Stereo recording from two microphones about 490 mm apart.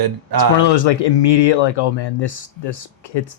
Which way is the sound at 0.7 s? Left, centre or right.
Left.